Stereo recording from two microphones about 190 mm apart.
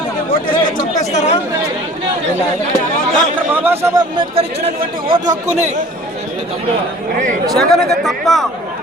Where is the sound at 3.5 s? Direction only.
10° right (ahead or behind).